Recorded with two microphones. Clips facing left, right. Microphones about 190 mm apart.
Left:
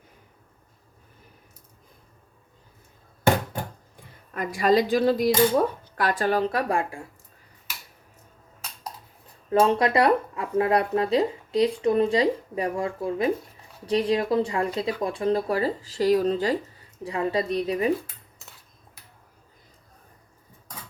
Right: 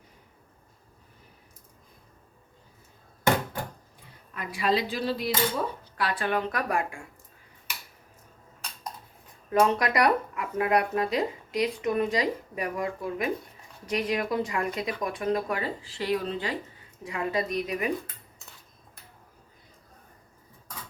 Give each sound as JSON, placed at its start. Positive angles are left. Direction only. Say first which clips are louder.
{"t": 4.4, "sound": "speech", "louder": "left 6 dB", "side_deg": 45}
{"t": 9.5, "sound": "speech", "louder": "left 3 dB", "side_deg": 30}